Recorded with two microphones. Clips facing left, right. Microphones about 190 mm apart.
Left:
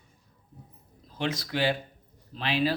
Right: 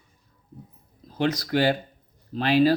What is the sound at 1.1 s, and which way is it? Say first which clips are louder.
Speech: right 7 dB; 40° right (ahead or behind).